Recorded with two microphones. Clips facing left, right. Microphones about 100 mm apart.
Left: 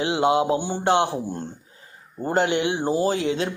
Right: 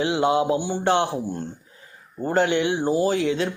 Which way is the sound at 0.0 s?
25° left (ahead or behind).